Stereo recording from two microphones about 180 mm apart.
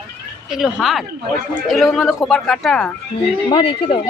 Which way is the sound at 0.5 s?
Centre (ahead or behind).